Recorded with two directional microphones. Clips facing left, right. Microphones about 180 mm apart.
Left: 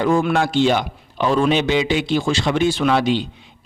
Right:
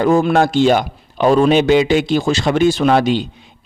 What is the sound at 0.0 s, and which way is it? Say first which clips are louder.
A man's voice: right 4 dB; 40° right (ahead or behind).